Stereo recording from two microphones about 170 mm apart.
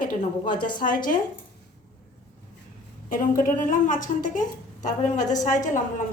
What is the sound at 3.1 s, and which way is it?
A woman's voice, 55° left (ahead or behind).